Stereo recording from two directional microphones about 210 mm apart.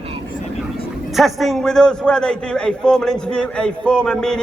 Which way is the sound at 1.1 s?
Centre (ahead or behind).